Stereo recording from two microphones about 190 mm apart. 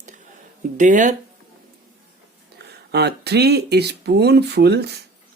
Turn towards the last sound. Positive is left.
turn(degrees=-60)  # may be behind; listen again after turning